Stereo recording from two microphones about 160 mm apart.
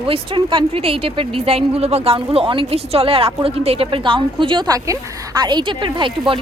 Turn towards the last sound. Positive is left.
turn(degrees=-30)  # may be behind; listen again after turning